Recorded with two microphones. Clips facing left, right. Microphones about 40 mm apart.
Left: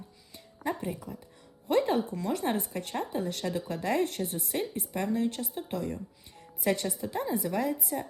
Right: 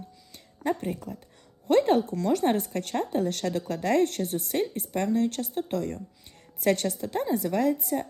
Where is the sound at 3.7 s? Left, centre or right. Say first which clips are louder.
Right 6 dB; right.